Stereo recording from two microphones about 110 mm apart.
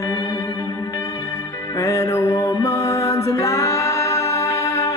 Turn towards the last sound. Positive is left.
turn(degrees=30)  # may be behind; listen again after turning